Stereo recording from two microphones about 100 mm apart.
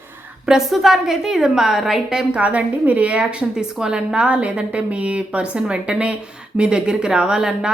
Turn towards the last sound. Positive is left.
turn(degrees=-5)  # may be behind; listen again after turning